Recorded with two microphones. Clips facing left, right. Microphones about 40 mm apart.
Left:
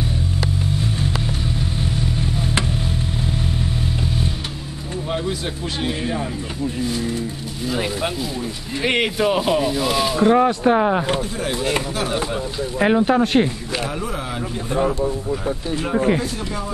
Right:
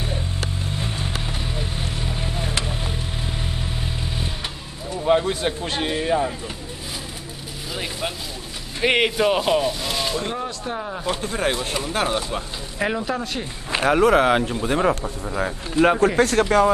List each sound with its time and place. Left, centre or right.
1.8 s vehicle: centre
5.2 s speech: right
6.0 s speech: centre
8.8 s speech: centre
10.3 s speech: left
12.2 s speech: centre
13.0 s speech: left
13.8 s a man's voice: right